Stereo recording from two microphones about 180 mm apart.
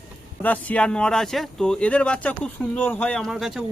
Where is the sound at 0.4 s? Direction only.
10° left (ahead or behind).